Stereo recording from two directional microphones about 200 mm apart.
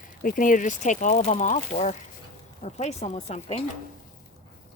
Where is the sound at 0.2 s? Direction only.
45° left (ahead or behind).